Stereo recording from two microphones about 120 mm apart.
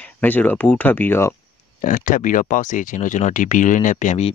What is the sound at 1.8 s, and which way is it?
Speech, 90° left.